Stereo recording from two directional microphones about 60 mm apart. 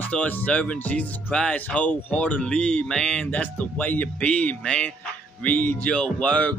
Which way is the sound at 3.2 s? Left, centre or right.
Left.